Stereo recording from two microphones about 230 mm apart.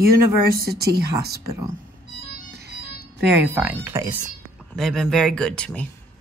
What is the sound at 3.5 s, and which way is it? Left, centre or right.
Speech, centre.